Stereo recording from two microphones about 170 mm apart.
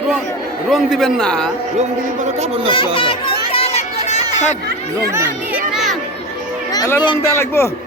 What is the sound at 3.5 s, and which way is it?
Children playing, 40° left (ahead or behind).